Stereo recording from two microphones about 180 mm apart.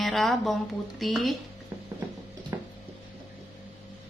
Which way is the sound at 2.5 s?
15° right (ahead or behind).